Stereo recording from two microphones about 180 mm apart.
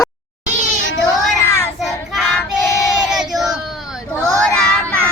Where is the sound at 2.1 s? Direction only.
Centre (ahead or behind).